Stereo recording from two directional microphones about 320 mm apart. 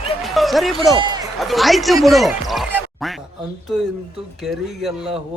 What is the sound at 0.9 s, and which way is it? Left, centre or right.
Speech, centre.